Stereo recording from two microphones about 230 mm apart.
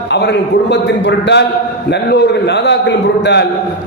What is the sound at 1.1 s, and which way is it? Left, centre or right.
A man's voice, left.